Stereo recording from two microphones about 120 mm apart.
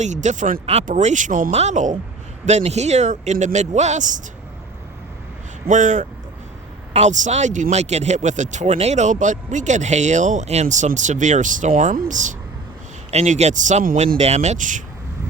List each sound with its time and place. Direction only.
0.0 s speech: 85° right
0.6 s speech: 65° right (ahead or behind); by 2.0 s 90° right
2.5 s speech: 70° right (ahead or behind); by 4.2 s 90° right
5.6 s speech: 90° right
13.1 s speech: 70° right (ahead or behind); by 14.8 s 90° right